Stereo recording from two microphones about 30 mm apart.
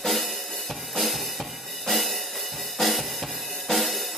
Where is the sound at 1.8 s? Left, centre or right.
Centre.